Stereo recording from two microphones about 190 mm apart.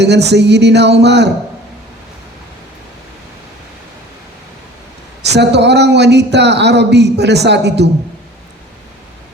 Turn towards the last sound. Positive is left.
turn(degrees=-65)  # may be behind; listen again after turning